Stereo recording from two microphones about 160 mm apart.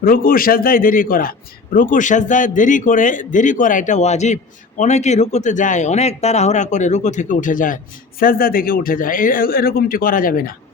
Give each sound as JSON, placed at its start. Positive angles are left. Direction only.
{"t": 0.0, "sound": "a man's voice", "side_deg": 60}